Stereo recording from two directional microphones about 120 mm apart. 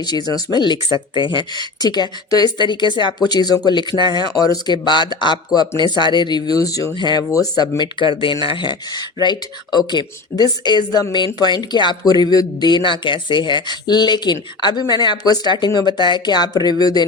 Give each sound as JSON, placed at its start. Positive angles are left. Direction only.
{"t": 0.0, "sound": "speech", "side_deg": 35}